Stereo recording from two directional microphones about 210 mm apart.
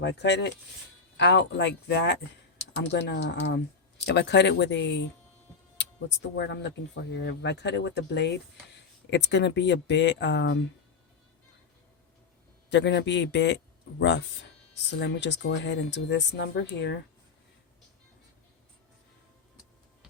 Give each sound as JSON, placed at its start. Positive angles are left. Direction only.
{"t": 0.0, "sound": "speech", "side_deg": 55}
{"t": 12.7, "sound": "speech", "side_deg": 55}